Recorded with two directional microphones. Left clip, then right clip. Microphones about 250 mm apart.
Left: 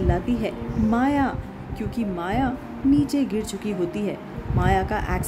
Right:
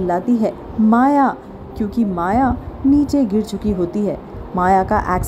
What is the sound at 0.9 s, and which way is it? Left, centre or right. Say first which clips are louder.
Speech: right 9 dB; centre.